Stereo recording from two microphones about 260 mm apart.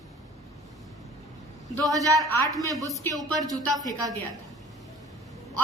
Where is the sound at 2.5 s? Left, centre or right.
Centre.